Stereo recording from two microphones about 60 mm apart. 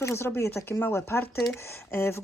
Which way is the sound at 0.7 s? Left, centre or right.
Left.